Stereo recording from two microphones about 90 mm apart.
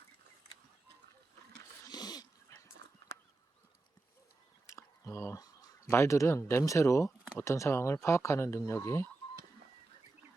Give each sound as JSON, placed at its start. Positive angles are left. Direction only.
{"t": 1.8, "sound": "dog", "side_deg": 45}
{"t": 4.7, "sound": "a sound", "side_deg": 30}
{"t": 5.8, "sound": "speech", "side_deg": 30}